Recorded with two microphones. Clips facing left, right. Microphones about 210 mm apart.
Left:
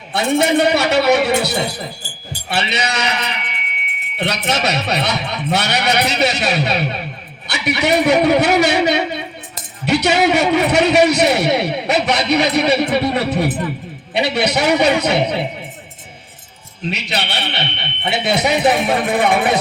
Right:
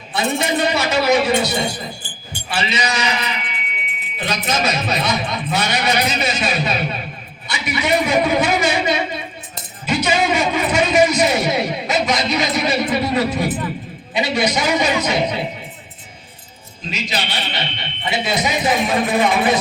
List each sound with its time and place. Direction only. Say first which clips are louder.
0.1 s a man's voice: left 5 dB; 60° left (ahead or behind)
16.9 s a man's voice: even; 65° left (ahead or behind)